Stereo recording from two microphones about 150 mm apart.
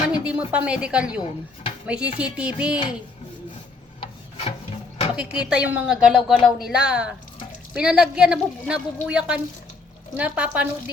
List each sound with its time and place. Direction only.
0.3 s a woman's voice: 10° right (ahead or behind)
4.0 s rub: 45° left (ahead or behind)
5.1 s a woman's voice: 10° right (ahead or behind)